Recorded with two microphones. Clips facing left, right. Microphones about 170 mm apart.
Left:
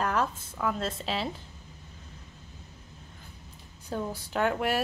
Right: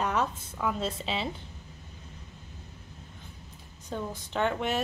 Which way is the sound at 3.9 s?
5° left (ahead or behind).